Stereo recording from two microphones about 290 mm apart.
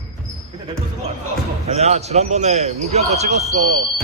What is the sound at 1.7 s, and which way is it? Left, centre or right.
A man's voice, right.